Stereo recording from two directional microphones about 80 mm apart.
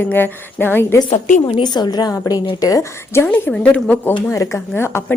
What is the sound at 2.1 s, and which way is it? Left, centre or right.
Speech, left.